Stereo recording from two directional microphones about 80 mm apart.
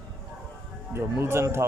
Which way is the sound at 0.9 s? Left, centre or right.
Right.